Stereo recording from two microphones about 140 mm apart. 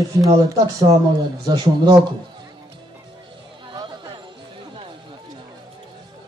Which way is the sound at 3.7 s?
30° right (ahead or behind).